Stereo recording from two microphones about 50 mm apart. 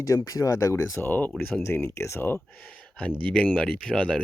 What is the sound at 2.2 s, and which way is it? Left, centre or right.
Speech, left.